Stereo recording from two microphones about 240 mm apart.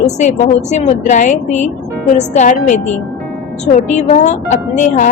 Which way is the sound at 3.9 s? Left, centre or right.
Left.